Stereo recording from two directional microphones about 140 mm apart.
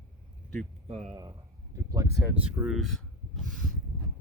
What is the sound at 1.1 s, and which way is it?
Speech, 25° right (ahead or behind).